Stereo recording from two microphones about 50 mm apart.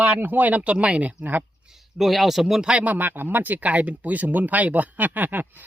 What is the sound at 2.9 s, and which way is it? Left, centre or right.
Speech, right.